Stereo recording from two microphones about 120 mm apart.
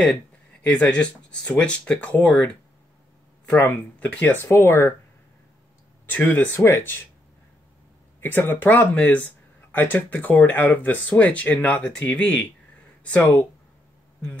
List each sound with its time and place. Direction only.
0.0 s speech: 10° left (ahead or behind)
6.0 s speech: 15° left (ahead or behind)
8.2 s speech: 20° left (ahead or behind)